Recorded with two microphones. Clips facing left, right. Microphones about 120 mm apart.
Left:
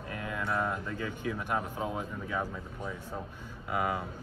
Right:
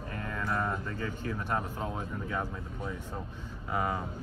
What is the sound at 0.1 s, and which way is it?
Speech, 5° left (ahead or behind).